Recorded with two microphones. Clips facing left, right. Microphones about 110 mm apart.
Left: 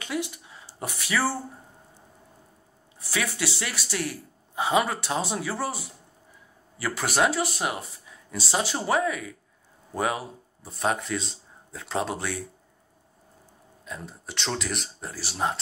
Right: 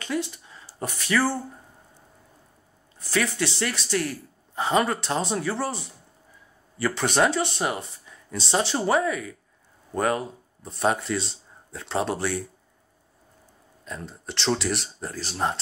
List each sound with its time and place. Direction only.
0.0 s speech: 15° left (ahead or behind)
3.0 s speech: 10° left (ahead or behind)
13.8 s speech: 5° left (ahead or behind)